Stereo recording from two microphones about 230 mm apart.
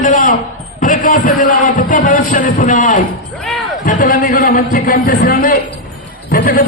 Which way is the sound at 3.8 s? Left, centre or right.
Left.